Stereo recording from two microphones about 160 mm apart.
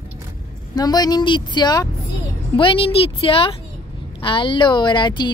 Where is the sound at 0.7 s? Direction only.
25° left (ahead or behind).